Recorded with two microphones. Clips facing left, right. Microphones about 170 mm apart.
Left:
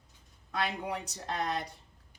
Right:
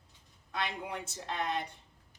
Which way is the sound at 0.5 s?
35° left (ahead or behind).